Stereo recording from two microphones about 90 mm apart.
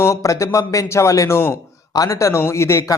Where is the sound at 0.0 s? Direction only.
35° left (ahead or behind).